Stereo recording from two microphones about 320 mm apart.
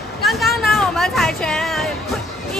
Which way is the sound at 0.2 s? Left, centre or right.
Centre.